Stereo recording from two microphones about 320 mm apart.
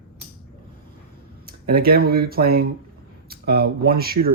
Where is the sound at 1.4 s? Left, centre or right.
Right.